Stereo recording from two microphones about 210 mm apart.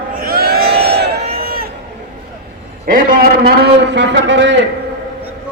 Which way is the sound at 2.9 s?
45° right (ahead or behind).